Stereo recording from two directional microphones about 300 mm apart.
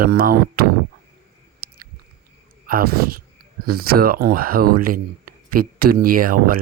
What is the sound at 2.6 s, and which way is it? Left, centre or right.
Speech, right.